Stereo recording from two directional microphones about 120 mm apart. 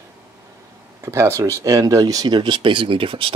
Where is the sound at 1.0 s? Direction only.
25° right (ahead or behind).